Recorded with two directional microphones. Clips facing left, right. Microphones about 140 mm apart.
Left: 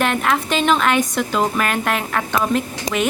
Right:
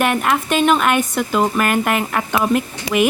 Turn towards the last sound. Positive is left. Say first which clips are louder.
# right 4 dB
turn(degrees=40)  # may be behind; listen again after turning